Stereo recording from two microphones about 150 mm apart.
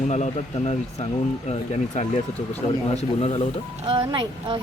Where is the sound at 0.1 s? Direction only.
45° left (ahead or behind).